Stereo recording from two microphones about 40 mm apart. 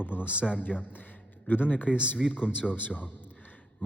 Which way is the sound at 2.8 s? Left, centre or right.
Left.